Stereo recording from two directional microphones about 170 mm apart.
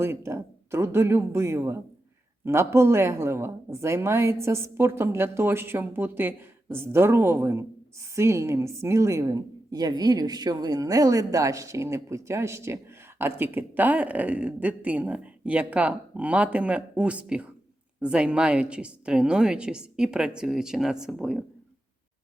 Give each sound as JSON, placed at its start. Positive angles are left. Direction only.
{"t": 0.0, "sound": "a woman's voice", "side_deg": -15}